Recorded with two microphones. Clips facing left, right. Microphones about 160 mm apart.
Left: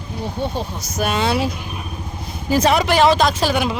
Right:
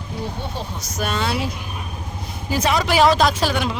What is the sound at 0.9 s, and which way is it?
Speech, 5° left (ahead or behind).